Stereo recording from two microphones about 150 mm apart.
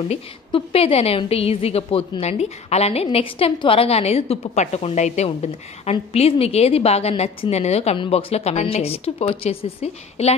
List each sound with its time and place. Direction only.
0.1 s a woman's voice: 40° left (ahead or behind)